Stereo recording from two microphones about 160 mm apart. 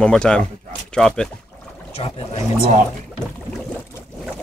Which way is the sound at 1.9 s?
40° left (ahead or behind).